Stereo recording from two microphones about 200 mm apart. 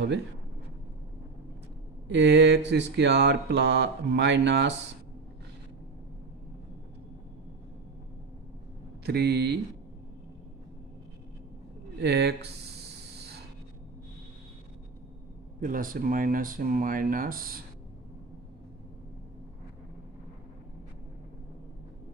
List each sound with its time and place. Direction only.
2.0 s speech: 65° right (ahead or behind)
9.0 s speech: 55° right (ahead or behind)
12.0 s speech: 55° right (ahead or behind)
15.6 s speech: 45° right (ahead or behind)